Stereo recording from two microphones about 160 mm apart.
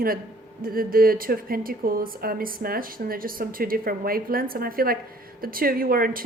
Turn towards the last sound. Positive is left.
turn(degrees=-65)  # may be behind; listen again after turning